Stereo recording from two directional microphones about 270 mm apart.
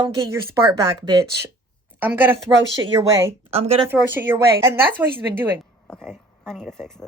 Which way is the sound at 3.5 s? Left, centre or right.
Right.